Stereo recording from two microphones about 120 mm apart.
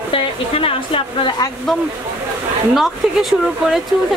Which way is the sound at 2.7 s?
Centre (ahead or behind).